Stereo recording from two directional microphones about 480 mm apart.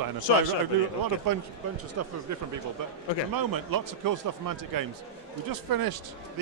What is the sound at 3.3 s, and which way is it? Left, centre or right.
A man's voice, right.